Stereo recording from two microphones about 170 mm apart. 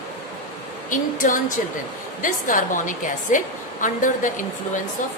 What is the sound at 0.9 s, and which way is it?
A woman's voice, 50° left (ahead or behind).